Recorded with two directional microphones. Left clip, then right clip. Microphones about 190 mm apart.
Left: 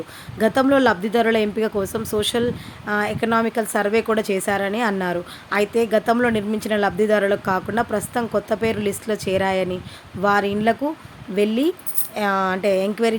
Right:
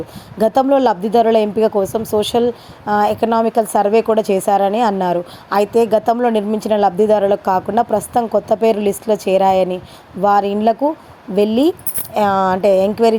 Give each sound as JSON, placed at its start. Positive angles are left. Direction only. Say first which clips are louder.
{"t": 0.3, "sound": "a woman's voice", "louder": "right 4 dB", "side_deg": -10}